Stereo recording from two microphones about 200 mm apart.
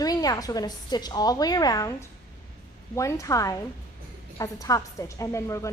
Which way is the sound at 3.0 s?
15° left (ahead or behind).